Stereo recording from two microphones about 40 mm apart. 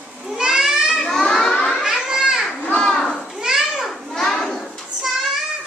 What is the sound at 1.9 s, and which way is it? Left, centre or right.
Children playing, centre.